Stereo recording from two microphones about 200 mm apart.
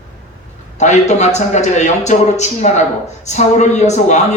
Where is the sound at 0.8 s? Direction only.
35° left (ahead or behind).